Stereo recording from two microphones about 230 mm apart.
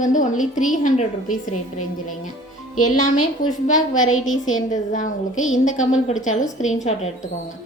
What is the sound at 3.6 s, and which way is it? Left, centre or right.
A woman's voice, left.